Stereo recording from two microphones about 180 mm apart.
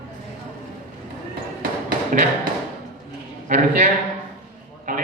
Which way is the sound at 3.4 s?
45° right (ahead or behind).